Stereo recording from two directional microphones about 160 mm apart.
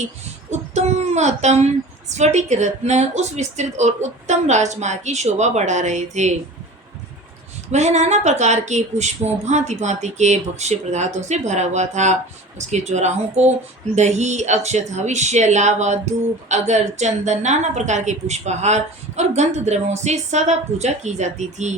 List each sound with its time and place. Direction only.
0.5 s speech: 45° right (ahead or behind)
7.7 s speech: 45° right (ahead or behind)